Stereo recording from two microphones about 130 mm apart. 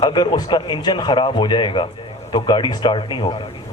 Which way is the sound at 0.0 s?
35° left (ahead or behind).